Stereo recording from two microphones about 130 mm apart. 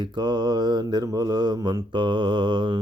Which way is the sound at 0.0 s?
35° right (ahead or behind).